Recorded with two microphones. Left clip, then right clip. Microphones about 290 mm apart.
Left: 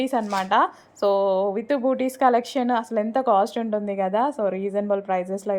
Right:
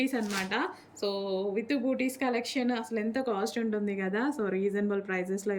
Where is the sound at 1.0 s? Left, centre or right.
Left.